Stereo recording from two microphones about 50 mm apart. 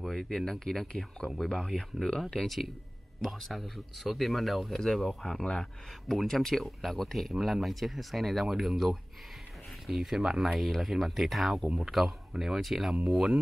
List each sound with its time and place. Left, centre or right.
0.0 s a sound: centre
0.5 s speech: centre
5.4 s speech: centre
6.0 s speech: centre
12.9 s speech: right